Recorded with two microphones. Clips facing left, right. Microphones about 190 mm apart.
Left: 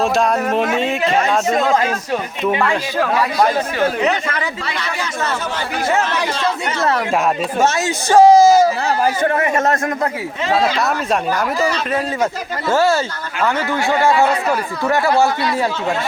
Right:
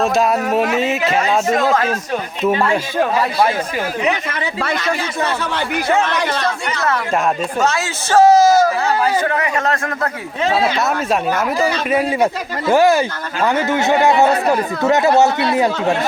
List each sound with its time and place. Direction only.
0.0 s speech: 5° right (ahead or behind)
8.1 s a man's voice: 10° left (ahead or behind)
10.5 s speech: 5° right (ahead or behind); by 16.0 s 20° right (ahead or behind)